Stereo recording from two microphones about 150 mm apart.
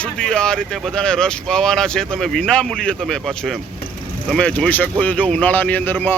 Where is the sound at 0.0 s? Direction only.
5° left (ahead or behind).